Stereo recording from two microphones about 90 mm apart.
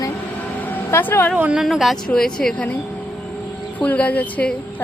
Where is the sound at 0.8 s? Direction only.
30° left (ahead or behind).